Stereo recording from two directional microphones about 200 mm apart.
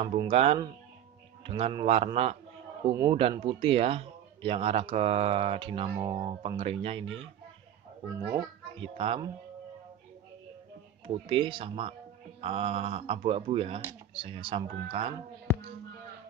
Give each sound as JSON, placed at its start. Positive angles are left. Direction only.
{"t": 0.2, "sound": "a child's voice", "side_deg": -30}
{"t": 8.1, "sound": "a child's voice", "side_deg": -15}
{"t": 8.7, "sound": "speech", "side_deg": -25}
{"t": 11.1, "sound": "speech", "side_deg": -25}